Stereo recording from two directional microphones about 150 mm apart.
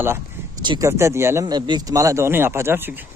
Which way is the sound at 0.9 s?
20° right (ahead or behind).